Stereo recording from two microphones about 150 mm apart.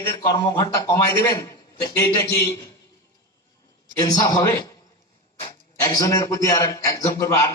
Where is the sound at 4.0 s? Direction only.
25° left (ahead or behind).